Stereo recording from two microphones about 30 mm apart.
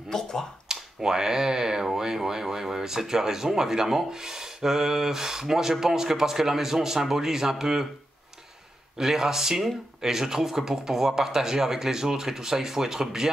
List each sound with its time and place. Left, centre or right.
0.1 s speech: centre
0.7 s speech: centre
8.9 s speech: centre